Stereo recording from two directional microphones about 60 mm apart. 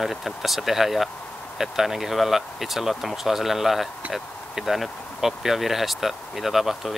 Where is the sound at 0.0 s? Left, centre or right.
Centre.